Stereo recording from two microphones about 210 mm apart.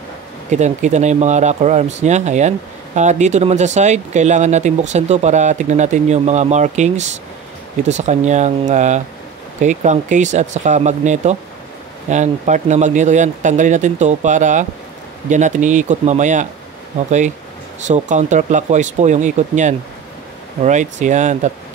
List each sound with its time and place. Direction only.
0.5 s speech: 35° right (ahead or behind)
17.8 s speech: 35° right (ahead or behind)